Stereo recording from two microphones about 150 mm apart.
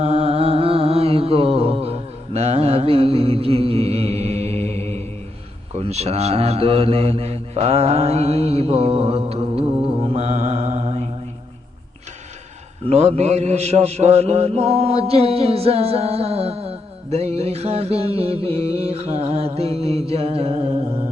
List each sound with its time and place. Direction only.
0.0 s a sound: 45° right (ahead or behind)
5.7 s speech: 45° right (ahead or behind)
12.9 s a man's voice: 45° right (ahead or behind)